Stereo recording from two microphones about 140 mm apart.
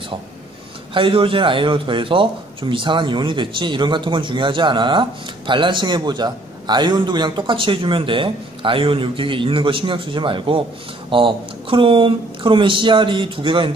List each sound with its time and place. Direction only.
0.9 s a man's voice: 40° right (ahead or behind)